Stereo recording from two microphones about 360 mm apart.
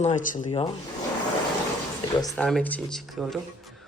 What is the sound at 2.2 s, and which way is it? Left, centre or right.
Speech, centre.